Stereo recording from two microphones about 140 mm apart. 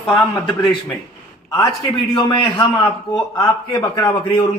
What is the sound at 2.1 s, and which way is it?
A man's voice, 30° left (ahead or behind).